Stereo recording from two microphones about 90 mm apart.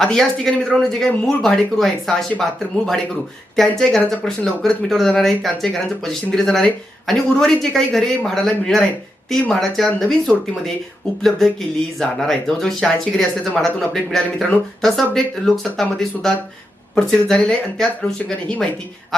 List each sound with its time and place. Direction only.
0.0 s speech: 5° left (ahead or behind)